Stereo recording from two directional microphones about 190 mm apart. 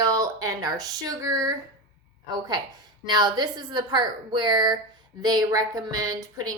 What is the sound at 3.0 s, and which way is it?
A woman's voice, 25° right (ahead or behind).